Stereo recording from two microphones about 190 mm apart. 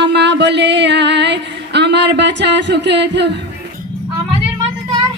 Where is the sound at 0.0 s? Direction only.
65° right (ahead or behind).